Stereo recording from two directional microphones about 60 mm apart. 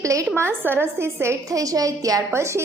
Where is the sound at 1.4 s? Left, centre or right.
Right.